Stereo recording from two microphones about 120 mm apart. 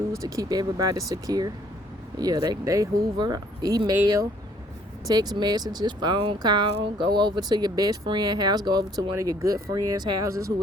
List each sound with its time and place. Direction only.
0.2 s speech: 30° right (ahead or behind)